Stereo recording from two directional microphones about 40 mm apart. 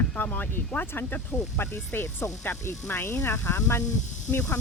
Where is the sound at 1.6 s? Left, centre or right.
Left.